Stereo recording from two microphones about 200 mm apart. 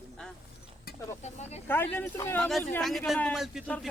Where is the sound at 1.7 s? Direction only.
10° left (ahead or behind).